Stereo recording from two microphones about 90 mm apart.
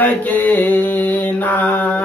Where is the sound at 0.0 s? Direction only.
20° left (ahead or behind).